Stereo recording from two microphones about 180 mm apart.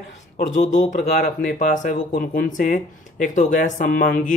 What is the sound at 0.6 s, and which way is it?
Speech, 45° left (ahead or behind).